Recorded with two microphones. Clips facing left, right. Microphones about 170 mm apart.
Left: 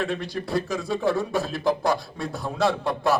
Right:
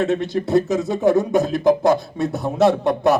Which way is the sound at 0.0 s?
20° right (ahead or behind).